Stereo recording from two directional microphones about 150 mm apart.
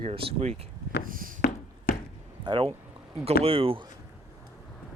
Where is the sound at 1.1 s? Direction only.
65° right (ahead or behind).